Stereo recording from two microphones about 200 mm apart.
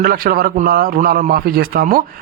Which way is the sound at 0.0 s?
45° right (ahead or behind).